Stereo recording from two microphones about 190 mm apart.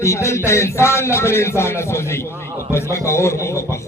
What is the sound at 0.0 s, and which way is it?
A man's voice, 15° left (ahead or behind).